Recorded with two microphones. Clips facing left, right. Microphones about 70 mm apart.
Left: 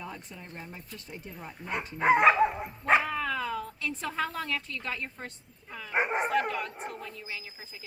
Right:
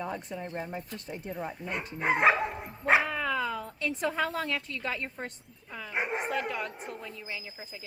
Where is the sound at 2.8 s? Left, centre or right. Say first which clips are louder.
Even; centre.